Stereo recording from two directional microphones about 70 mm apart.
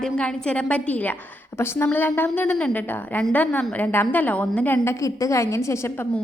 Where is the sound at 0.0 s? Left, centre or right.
Centre.